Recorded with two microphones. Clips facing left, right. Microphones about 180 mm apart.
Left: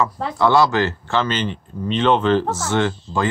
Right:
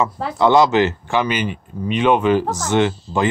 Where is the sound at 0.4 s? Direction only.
20° right (ahead or behind).